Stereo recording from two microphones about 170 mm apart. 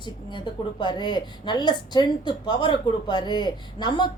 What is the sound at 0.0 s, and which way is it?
A woman's voice, 25° left (ahead or behind).